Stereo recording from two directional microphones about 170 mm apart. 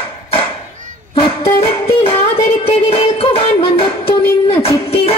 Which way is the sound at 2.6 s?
35° left (ahead or behind).